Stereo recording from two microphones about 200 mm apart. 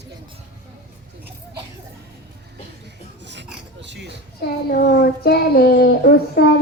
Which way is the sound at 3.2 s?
60° right (ahead or behind).